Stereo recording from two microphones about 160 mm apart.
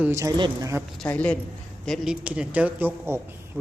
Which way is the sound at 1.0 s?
10° left (ahead or behind).